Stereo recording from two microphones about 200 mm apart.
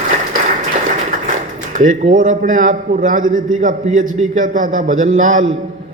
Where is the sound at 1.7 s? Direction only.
40° right (ahead or behind).